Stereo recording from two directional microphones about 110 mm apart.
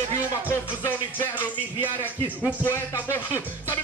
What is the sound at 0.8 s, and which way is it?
Music, 20° left (ahead or behind).